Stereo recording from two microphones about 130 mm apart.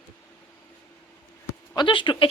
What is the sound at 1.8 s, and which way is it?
Speech, 40° left (ahead or behind).